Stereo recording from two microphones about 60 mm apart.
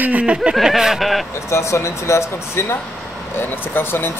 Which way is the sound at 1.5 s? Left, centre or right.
Left.